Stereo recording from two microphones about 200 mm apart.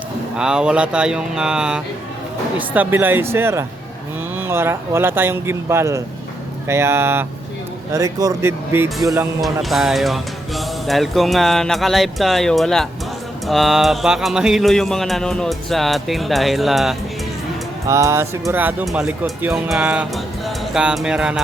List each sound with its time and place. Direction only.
0.3 s speech: 5° right (ahead or behind)
9.4 s speech: centre (ahead or behind)
17.8 s speech: 15° right (ahead or behind)